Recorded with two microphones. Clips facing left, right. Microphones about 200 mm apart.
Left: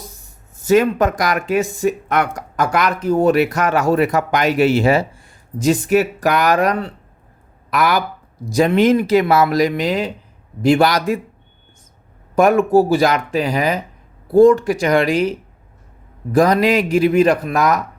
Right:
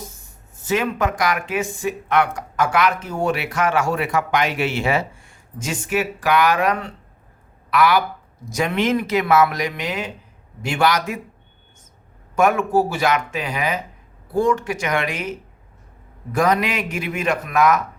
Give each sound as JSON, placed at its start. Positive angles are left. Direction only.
{"t": 0.7, "sound": "speech", "side_deg": 40}
{"t": 12.4, "sound": "speech", "side_deg": 35}